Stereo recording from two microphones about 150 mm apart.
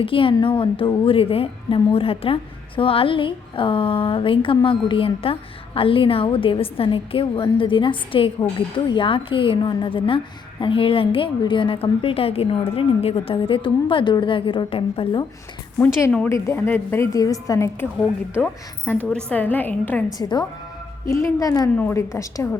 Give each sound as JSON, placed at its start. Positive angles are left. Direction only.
{"t": 0.0, "sound": "a woman's voice", "side_deg": 35}
{"t": 15.8, "sound": "a woman's voice", "side_deg": 15}
{"t": 20.1, "sound": "a woman's voice", "side_deg": 25}